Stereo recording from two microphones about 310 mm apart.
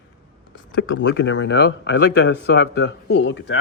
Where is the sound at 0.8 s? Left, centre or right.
Left.